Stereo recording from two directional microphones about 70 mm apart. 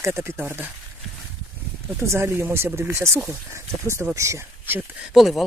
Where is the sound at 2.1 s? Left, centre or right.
Right.